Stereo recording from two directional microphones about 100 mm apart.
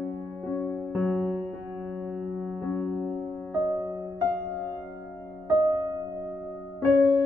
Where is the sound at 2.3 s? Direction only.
Centre (ahead or behind).